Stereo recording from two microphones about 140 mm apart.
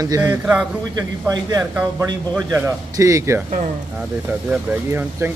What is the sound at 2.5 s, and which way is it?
Speech, 20° right (ahead or behind).